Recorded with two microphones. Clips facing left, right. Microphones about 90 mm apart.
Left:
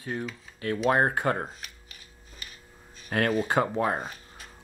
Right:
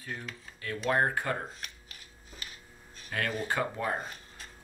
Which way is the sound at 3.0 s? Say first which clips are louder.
Left 7 dB; 50° left (ahead or behind).